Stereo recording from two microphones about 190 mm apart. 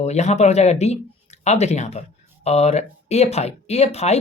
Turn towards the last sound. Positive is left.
turn(degrees=35)  # may be behind; listen again after turning